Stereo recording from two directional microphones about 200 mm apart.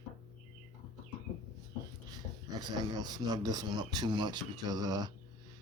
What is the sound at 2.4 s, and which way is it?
Speech, 20° right (ahead or behind).